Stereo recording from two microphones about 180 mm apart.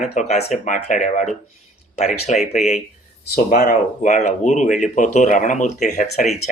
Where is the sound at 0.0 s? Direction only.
40° left (ahead or behind).